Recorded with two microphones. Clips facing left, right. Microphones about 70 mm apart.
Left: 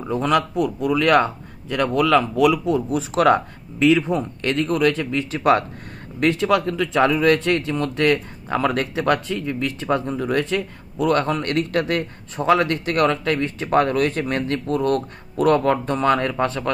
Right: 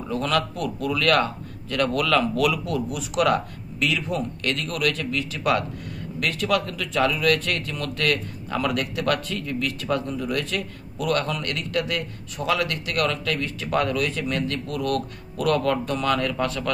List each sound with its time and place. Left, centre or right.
0.1 s a man's voice: left
9.0 s a man's voice: left